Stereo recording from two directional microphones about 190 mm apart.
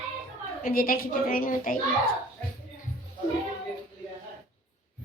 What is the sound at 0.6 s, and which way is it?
A woman's voice, 50° left (ahead or behind).